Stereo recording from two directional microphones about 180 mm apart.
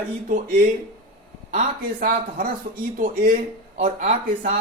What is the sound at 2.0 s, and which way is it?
Speech, 50° right (ahead or behind).